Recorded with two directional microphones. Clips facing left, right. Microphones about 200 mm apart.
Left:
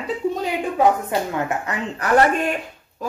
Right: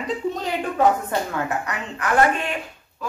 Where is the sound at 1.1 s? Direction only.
20° left (ahead or behind).